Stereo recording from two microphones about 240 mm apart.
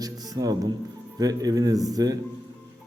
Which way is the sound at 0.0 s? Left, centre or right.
Centre.